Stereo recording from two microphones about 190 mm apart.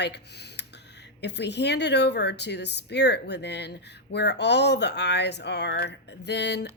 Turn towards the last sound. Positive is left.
turn(degrees=65)  # may be behind; listen again after turning